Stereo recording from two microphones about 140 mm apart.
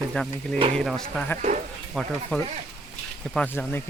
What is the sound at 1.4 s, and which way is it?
Speech, 60° right (ahead or behind).